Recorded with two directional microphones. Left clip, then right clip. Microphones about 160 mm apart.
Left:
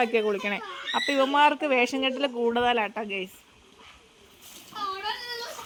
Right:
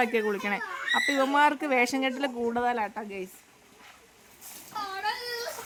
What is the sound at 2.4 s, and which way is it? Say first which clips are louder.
Speech: left 4 dB; centre (ahead or behind).